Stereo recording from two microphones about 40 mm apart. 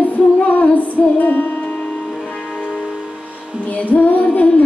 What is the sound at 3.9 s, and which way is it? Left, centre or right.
Female singing, left.